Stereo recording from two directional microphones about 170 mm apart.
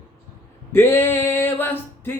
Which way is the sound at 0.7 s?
15° left (ahead or behind).